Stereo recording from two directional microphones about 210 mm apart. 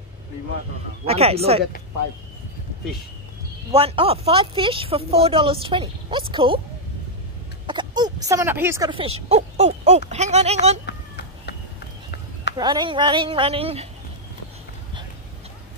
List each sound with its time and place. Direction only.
1.0 s speech: 30° right (ahead or behind)
3.7 s speech: 25° right (ahead or behind)
7.6 s speech: 20° right (ahead or behind)
10.9 s a sound: 50° left (ahead or behind)
12.5 s speech: 20° right (ahead or behind)